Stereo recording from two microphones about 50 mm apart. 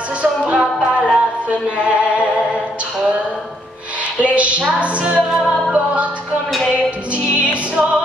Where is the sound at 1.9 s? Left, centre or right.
Right.